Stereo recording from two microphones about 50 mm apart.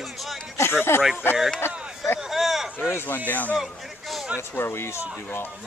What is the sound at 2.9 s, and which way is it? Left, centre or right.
Speech, left.